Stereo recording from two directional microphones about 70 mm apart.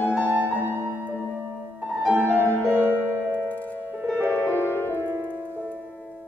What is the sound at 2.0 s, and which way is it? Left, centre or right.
Music, right.